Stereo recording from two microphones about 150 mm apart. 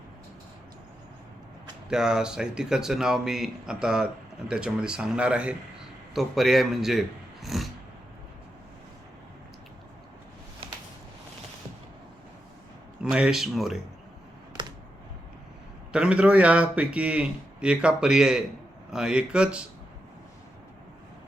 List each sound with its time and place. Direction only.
1.9 s speech: 5° right (ahead or behind)
7.4 s a sound: centre (ahead or behind)
13.0 s speech: 5° right (ahead or behind)
14.6 s computer keyboard: 30° right (ahead or behind)
15.9 s speech: 5° right (ahead or behind)